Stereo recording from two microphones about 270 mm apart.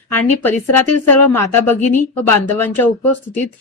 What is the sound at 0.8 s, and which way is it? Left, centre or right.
Speech, left.